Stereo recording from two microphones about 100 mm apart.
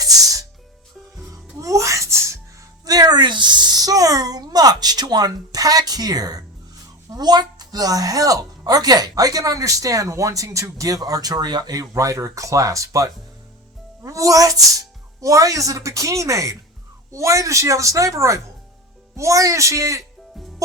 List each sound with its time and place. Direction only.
0.0 s music: 35° right (ahead or behind)
1.5 s a sound: 30° right (ahead or behind)
7.1 s speech: 45° right (ahead or behind)